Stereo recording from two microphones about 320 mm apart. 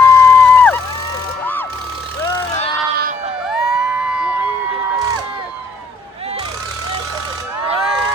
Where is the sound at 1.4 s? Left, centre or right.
Centre.